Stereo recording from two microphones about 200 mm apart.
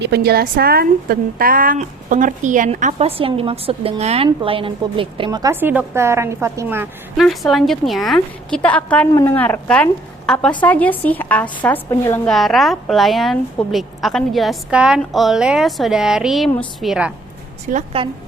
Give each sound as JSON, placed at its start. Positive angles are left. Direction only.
{"t": 0.0, "sound": "a woman's voice", "side_deg": -55}
{"t": 7.2, "sound": "a woman's voice", "side_deg": 0}
{"t": 12.3, "sound": "a woman's voice", "side_deg": 0}
{"t": 17.7, "sound": "a woman's voice", "side_deg": -40}